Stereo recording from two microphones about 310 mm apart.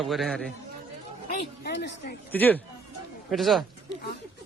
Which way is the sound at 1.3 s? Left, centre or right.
Left.